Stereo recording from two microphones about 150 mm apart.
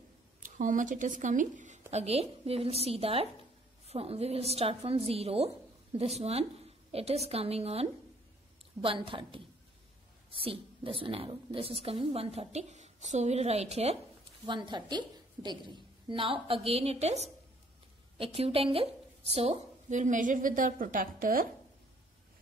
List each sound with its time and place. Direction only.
0.6 s a woman's voice: 60° right (ahead or behind)
14.4 s a woman's voice: 30° right (ahead or behind); by 21.5 s 70° right (ahead or behind)